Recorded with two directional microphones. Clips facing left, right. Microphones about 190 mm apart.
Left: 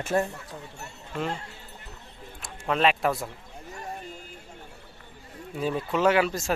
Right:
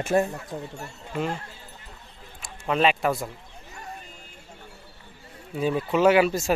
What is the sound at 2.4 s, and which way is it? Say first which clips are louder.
Speech: right 1 dB; centre (ahead or behind).